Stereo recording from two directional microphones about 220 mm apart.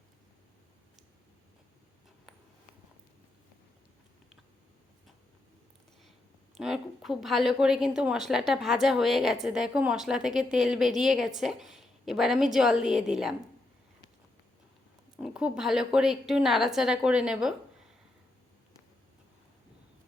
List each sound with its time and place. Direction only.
6.5 s a woman's voice: centre (ahead or behind)
15.2 s a woman's voice: 5° right (ahead or behind)